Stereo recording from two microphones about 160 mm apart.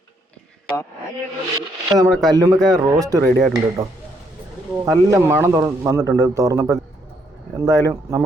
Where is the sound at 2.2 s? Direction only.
20° right (ahead or behind).